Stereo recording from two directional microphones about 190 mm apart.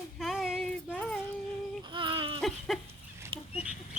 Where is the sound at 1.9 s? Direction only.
25° right (ahead or behind).